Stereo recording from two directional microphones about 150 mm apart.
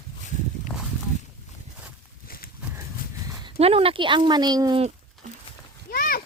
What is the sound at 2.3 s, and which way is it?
Walk, 80° left.